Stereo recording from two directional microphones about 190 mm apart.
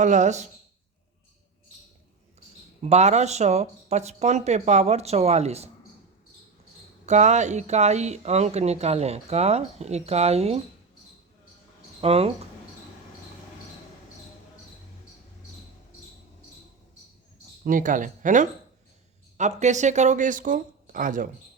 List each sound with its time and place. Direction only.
0.0 s speech: 40° right (ahead or behind)
2.8 s speech: 35° right (ahead or behind)
7.0 s speech: 35° right (ahead or behind)
11.9 s speech: 30° right (ahead or behind)
17.7 s speech: 45° right (ahead or behind)